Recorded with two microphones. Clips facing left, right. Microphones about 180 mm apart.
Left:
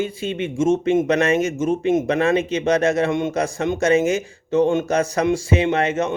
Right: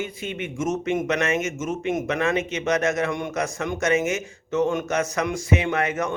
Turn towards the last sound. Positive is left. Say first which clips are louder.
# left 4 dB
turn(degrees=25)  # may be behind; listen again after turning